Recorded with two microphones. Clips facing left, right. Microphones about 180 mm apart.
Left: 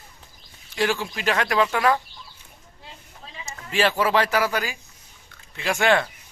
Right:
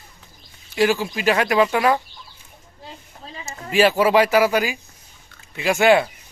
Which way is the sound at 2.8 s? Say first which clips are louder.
Right 5 dB; 35° right (ahead or behind).